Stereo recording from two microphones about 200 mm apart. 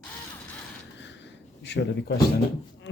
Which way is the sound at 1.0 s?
60° left (ahead or behind).